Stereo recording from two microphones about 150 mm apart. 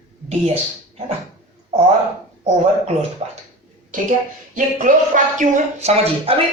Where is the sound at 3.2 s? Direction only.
45° right (ahead or behind).